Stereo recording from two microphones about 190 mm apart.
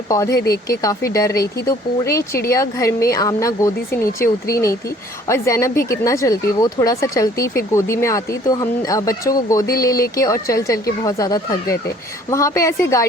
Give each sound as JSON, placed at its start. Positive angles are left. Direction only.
{"t": 0.1, "sound": "a woman's voice", "side_deg": 15}